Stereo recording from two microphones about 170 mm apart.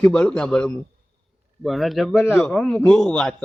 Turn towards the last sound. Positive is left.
turn(degrees=5)  # may be behind; listen again after turning